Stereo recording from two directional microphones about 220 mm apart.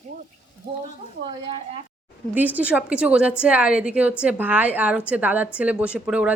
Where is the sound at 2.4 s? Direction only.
5° right (ahead or behind).